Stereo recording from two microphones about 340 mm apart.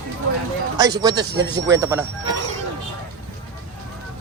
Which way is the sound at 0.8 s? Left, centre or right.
Centre.